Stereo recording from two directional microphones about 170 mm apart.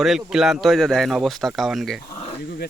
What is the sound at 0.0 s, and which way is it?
Speech, centre (ahead or behind).